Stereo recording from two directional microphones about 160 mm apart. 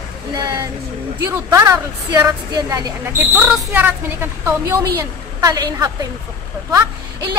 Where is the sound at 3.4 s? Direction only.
10° right (ahead or behind).